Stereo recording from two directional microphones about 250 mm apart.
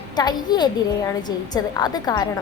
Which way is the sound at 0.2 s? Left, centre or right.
Centre.